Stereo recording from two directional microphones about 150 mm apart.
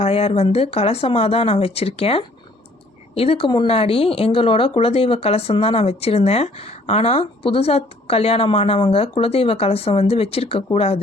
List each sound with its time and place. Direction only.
0.0 s speech: 45° left (ahead or behind)